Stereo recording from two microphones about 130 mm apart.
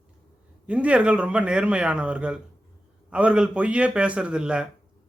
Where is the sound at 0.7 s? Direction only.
10° right (ahead or behind).